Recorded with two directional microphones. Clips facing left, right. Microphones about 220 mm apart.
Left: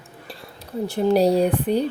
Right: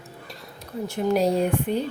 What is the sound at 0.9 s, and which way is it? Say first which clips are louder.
Speech: left 4 dB; 35° left (ahead or behind).